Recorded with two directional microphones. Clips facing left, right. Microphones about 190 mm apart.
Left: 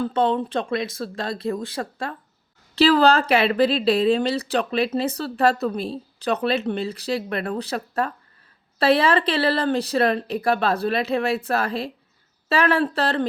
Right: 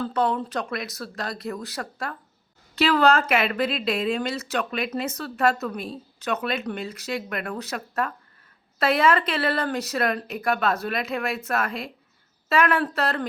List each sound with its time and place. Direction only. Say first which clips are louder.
0.0 s speech: left 3 dB; 25° left (ahead or behind)